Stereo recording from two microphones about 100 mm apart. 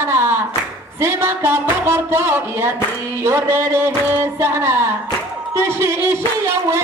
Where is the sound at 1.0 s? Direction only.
25° right (ahead or behind).